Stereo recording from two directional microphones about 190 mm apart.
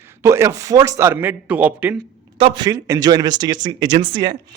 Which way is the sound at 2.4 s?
25° right (ahead or behind).